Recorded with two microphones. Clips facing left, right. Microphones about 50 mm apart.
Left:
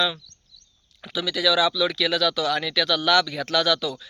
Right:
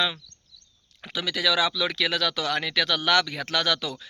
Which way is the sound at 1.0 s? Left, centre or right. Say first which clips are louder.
Left 3 dB; right.